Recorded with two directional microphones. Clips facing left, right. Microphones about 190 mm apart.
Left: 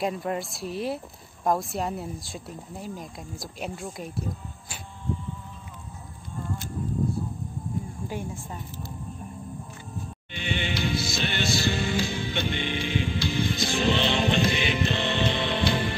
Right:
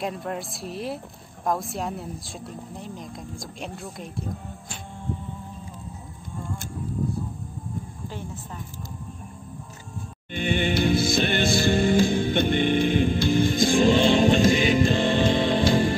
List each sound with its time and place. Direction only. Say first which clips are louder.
0.0 s speech: left 2 dB; centre (ahead or behind)
10.3 s music: right 7 dB; 50° right (ahead or behind)